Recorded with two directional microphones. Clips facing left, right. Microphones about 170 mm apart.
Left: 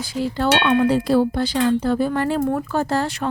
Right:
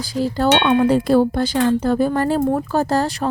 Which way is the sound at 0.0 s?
35° right (ahead or behind).